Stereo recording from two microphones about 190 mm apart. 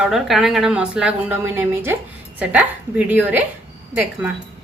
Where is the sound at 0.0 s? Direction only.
Centre (ahead or behind).